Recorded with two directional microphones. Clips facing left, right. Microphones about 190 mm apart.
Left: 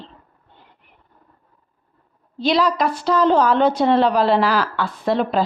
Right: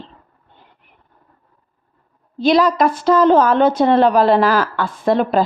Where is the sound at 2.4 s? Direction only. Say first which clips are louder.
Right 4 dB; 50° right (ahead or behind).